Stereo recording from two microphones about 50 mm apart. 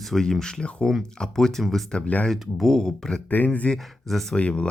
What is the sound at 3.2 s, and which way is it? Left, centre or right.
Speech, left.